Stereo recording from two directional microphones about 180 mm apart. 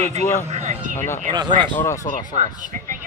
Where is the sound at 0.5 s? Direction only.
40° right (ahead or behind).